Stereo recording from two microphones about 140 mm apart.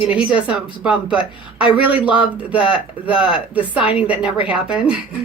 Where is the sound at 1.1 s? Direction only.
40° left (ahead or behind).